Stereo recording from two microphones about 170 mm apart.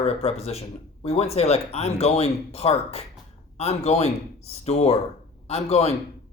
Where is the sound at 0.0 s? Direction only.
35° left (ahead or behind).